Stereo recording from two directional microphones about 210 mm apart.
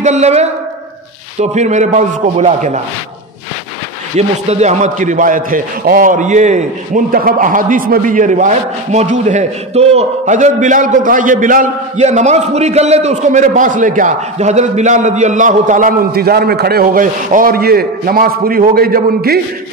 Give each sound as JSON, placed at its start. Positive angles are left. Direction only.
{"t": 0.0, "sound": "a woman's voice", "side_deg": -30}
{"t": 4.2, "sound": "a man's voice", "side_deg": -30}